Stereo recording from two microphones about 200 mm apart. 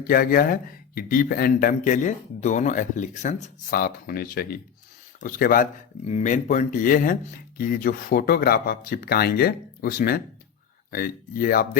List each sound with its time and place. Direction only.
0.1 s speech: 45° left (ahead or behind)
6.1 s speech: 35° left (ahead or behind)